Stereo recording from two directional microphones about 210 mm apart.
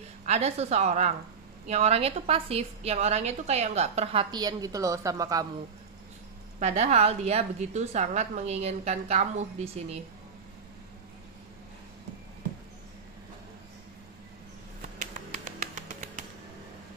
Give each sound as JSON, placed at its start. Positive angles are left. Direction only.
{"t": 0.2, "sound": "a woman's voice", "side_deg": -30}
{"t": 6.6, "sound": "a woman's voice", "side_deg": -30}
{"t": 14.8, "sound": "a sound", "side_deg": -40}